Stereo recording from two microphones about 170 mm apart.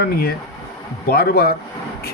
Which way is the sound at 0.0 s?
65° left (ahead or behind).